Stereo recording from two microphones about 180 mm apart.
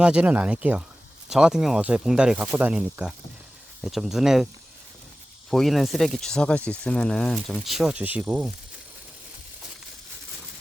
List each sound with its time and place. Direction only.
0.0 s speech: 5° right (ahead or behind)
5.5 s speech: centre (ahead or behind)